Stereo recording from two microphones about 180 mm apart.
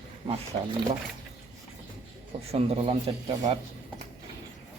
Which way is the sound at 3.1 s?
30° right (ahead or behind).